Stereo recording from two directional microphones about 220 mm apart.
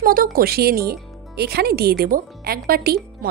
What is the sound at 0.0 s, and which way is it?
Speech, 40° right (ahead or behind).